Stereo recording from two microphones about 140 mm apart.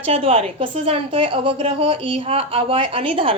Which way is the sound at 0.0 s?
45° right (ahead or behind).